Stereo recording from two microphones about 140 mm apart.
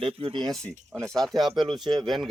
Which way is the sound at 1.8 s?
30° right (ahead or behind).